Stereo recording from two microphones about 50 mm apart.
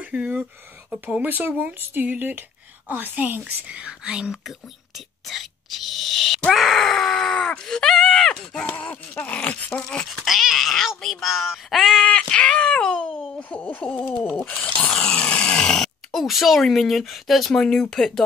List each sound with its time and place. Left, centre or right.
0.0 s speech: right
1.2 s a woman's voice: right
3.8 s speech: centre
4.5 s speech: centre
6.5 s groan: centre
7.6 s speech: centre
8.8 s a sound: left
10.0 s groan: centre
12.0 s a sound: centre
13.4 s speech: left
15.0 s speech: centre